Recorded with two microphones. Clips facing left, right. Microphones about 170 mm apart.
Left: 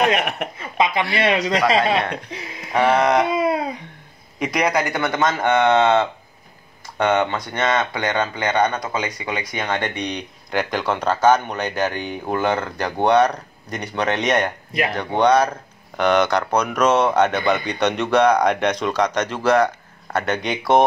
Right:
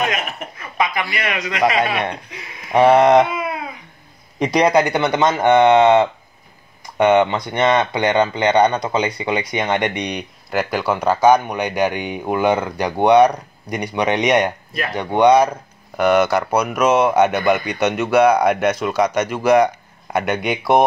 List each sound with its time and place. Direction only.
0.2 s speech: 65° left (ahead or behind)
0.6 s a sound: 25° left (ahead or behind)
1.1 s a man's voice: 30° left (ahead or behind)
2.7 s speech: 20° right (ahead or behind)
3.3 s a sound: 35° left (ahead or behind)
4.4 s speech: 30° right (ahead or behind); by 20.8 s 10° right (ahead or behind)